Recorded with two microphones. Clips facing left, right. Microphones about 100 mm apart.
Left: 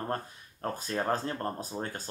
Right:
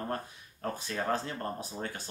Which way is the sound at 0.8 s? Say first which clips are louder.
Left 2 dB; 40° left (ahead or behind).